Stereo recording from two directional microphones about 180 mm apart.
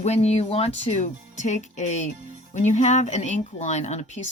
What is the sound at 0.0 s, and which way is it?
Speech, 35° left (ahead or behind).